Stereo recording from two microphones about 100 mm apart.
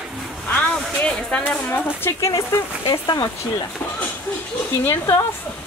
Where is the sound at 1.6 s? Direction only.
25° left (ahead or behind).